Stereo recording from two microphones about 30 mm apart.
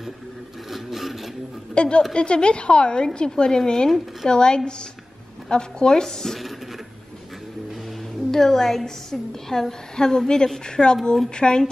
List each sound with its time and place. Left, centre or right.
0.7 s a sound: centre
1.8 s a woman's voice: left; by 6.4 s centre
8.3 s a woman's voice: centre; by 11.7 s left